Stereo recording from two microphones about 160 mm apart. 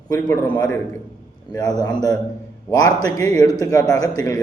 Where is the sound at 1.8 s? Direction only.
20° left (ahead or behind).